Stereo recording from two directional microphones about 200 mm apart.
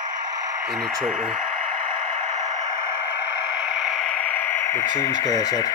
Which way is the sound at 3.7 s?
Centre (ahead or behind).